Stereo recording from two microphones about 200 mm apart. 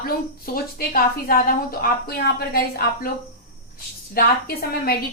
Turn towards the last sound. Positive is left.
turn(degrees=50)  # may be behind; listen again after turning